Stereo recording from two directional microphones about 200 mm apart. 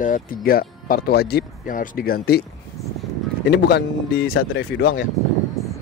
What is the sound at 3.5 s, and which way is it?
Speech, 55° left (ahead or behind).